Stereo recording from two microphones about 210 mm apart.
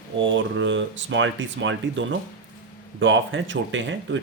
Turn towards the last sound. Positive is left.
turn(degrees=-60)  # may be behind; listen again after turning